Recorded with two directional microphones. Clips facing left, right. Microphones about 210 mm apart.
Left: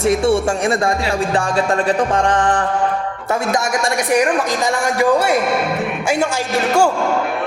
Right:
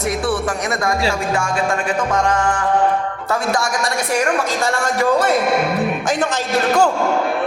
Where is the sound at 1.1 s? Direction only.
35° left (ahead or behind).